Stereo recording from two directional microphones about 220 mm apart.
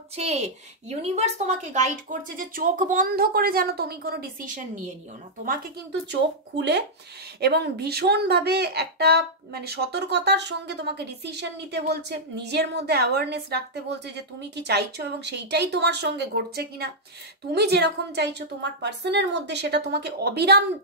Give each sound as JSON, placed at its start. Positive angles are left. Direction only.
{"t": 0.1, "sound": "a woman's voice", "side_deg": -30}